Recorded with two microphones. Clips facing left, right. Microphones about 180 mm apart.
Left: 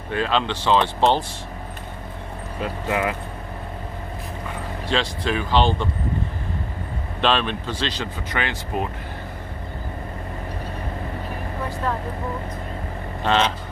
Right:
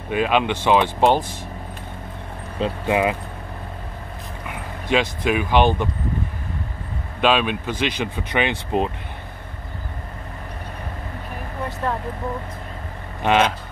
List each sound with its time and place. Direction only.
0.1 s speech: 15° right (ahead or behind)
2.6 s speech: 20° right (ahead or behind)
4.8 s speech: 15° right (ahead or behind)
7.2 s speech: 10° right (ahead or behind)
13.2 s speech: 10° right (ahead or behind)